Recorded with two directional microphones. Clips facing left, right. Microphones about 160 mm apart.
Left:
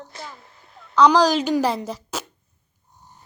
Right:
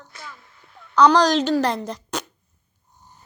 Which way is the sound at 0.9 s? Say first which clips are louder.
Even; centre (ahead or behind).